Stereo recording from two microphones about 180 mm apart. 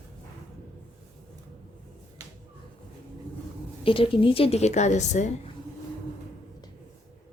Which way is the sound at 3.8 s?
30° left (ahead or behind).